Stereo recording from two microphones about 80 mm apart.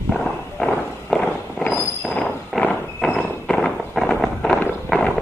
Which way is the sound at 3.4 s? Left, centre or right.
Centre.